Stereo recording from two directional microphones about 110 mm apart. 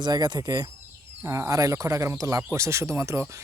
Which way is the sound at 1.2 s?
25° right (ahead or behind).